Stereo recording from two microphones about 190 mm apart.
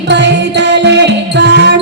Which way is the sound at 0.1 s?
65° right (ahead or behind).